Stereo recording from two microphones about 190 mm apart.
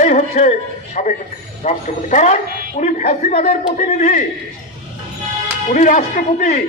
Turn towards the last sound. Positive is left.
turn(degrees=40)  # may be behind; listen again after turning